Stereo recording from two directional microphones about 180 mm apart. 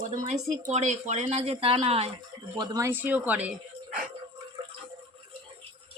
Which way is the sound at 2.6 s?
15° right (ahead or behind).